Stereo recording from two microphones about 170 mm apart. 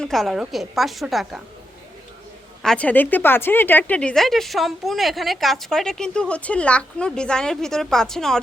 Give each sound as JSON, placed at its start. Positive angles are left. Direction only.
{"t": 0.0, "sound": "speech", "side_deg": 0}
{"t": 2.6, "sound": "speech", "side_deg": 10}